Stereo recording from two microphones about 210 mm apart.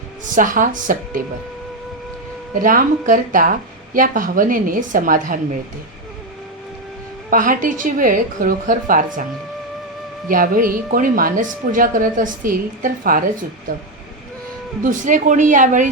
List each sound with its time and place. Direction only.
0.3 s speech: 40° right (ahead or behind)
2.6 s speech: 40° right (ahead or behind)
7.3 s speech: 40° right (ahead or behind)
10.2 s speech: 40° right (ahead or behind)
14.8 s speech: 40° right (ahead or behind)